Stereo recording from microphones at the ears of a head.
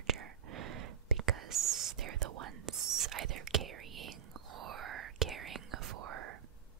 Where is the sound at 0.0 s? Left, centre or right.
Right.